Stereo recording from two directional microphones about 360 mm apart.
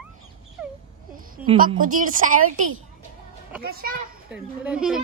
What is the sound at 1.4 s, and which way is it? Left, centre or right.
Speech, centre.